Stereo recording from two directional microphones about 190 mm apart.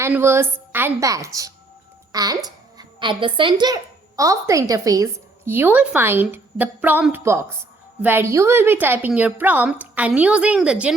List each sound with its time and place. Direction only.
0.0 s a woman's voice: 10° right (ahead or behind)